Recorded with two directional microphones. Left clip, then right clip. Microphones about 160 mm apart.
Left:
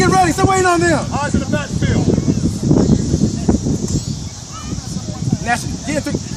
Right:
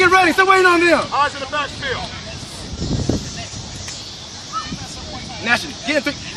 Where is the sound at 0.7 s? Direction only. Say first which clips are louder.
Right 1 dB; 60° left (ahead or behind).